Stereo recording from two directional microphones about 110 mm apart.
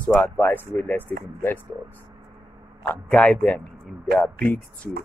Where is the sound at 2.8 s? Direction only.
15° left (ahead or behind).